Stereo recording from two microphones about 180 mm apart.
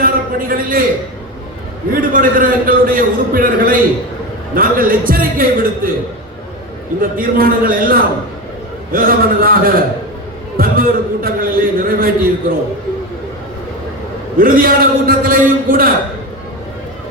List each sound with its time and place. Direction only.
0.0 s a man's voice: 50° right (ahead or behind)
1.9 s a man's voice: 50° right (ahead or behind)
7.0 s a man's voice: 50° right (ahead or behind)
14.3 s a man's voice: 50° right (ahead or behind)